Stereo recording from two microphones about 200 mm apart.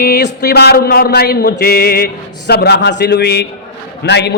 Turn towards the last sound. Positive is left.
turn(degrees=55)  # may be behind; listen again after turning